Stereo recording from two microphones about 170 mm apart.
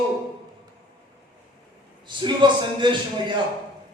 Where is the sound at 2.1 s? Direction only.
25° right (ahead or behind).